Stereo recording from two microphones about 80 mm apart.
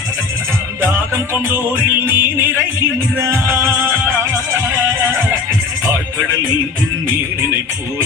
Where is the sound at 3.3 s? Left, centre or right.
Right.